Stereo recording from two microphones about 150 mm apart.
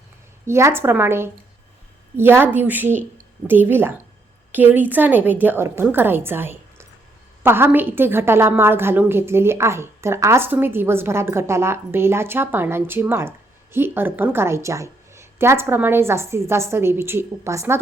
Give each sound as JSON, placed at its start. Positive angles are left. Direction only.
{"t": 0.4, "sound": "a woman's voice", "side_deg": -15}